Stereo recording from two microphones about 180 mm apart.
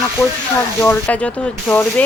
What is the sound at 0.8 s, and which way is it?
Stir, 10° left (ahead or behind).